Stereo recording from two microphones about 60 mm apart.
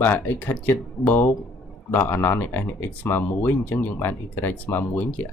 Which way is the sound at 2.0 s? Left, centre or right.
Left.